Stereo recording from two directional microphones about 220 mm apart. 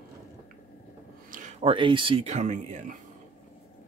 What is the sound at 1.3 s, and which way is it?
Speech, 35° right (ahead or behind).